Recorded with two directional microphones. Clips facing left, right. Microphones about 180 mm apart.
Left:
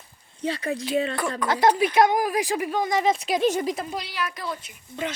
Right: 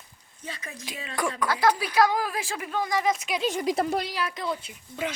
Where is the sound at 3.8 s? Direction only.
65° right (ahead or behind).